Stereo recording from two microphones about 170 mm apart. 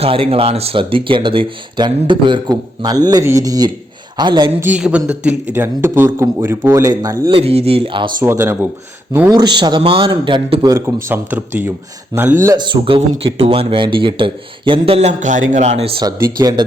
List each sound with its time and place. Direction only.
0.0 s speech: 35° right (ahead or behind)
4.6 s speech: 10° right (ahead or behind)
7.3 s speech: 35° right (ahead or behind)
8.2 s speech: 15° right (ahead or behind)
9.3 s speech: 25° right (ahead or behind)
12.5 s speech: 30° right (ahead or behind)
16.4 s speech: 25° right (ahead or behind)